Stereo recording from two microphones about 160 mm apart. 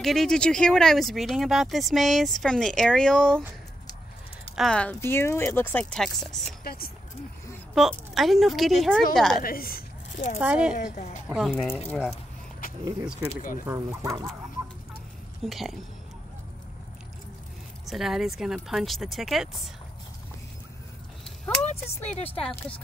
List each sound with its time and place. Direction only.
0.0 s speech: centre (ahead or behind)
4.6 s speech: 5° left (ahead or behind)
6.6 s speech: 70° left (ahead or behind)
7.7 s speech: centre (ahead or behind)
9.4 s a woman's voice: 65° left (ahead or behind)
10.4 s speech: 5° right (ahead or behind)
10.8 s a woman's voice: 50° left (ahead or behind)
11.2 s speech: centre (ahead or behind)
12.6 s a sound: 60° left (ahead or behind)
13.7 s speech: 20° right (ahead or behind)
15.4 s speech: centre (ahead or behind)
17.8 s speech: centre (ahead or behind)
21.6 s speech: 40° left (ahead or behind)
22.3 s speech: 10° left (ahead or behind)